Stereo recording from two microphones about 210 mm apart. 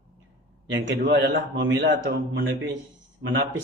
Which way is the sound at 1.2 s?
60° right (ahead or behind).